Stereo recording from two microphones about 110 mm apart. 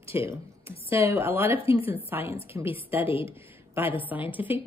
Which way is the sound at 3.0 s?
55° left (ahead or behind).